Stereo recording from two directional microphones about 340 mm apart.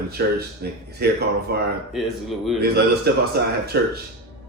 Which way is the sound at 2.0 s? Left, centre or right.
Centre.